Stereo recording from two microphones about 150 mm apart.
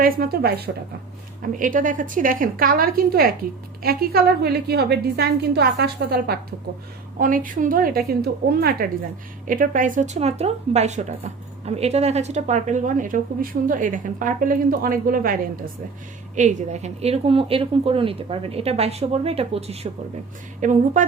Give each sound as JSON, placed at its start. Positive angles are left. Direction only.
{"t": 0.0, "sound": "a woman's voice", "side_deg": -90}
{"t": 1.4, "sound": "a woman's voice", "side_deg": -65}
{"t": 7.2, "sound": "a woman's voice", "side_deg": -65}
{"t": 9.5, "sound": "speech", "side_deg": -65}
{"t": 16.3, "sound": "speech", "side_deg": -55}
{"t": 20.6, "sound": "speech", "side_deg": -55}